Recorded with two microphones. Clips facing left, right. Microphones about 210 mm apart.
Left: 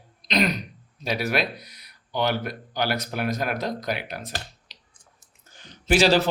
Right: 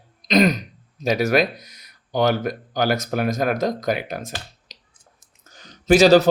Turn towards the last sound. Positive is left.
turn(degrees=-40)  # may be behind; listen again after turning